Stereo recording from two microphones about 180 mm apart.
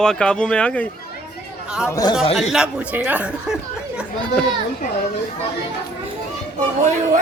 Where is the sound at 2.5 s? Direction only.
5° right (ahead or behind).